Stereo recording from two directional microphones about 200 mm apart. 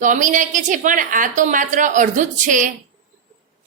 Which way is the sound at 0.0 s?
40° right (ahead or behind).